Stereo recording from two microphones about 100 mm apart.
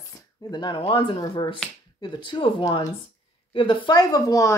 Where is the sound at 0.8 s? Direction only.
60° left (ahead or behind).